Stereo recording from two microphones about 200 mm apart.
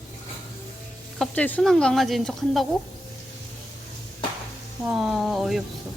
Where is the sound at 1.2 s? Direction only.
5° left (ahead or behind).